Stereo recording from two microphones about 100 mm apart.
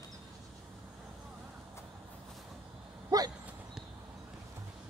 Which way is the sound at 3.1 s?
40° right (ahead or behind).